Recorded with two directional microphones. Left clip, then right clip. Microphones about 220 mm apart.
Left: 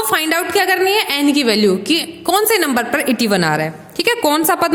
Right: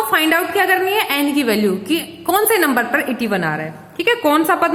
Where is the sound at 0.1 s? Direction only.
45° left (ahead or behind).